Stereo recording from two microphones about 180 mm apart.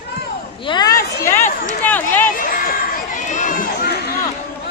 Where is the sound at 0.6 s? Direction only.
25° left (ahead or behind); by 2.3 s 10° left (ahead or behind).